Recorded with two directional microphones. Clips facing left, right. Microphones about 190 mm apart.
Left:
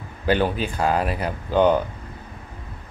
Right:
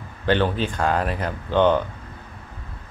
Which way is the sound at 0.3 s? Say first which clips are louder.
Even; 10° left (ahead or behind).